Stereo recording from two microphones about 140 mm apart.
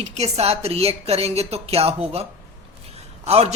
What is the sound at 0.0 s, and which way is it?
Speech, 50° right (ahead or behind).